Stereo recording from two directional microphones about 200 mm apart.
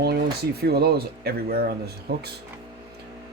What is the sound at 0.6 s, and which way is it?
Speech, 55° right (ahead or behind).